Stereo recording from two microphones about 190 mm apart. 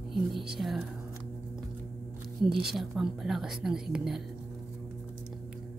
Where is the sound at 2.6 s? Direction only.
Centre (ahead or behind).